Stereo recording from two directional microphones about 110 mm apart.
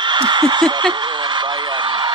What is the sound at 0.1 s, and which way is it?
Snicker, 45° right (ahead or behind).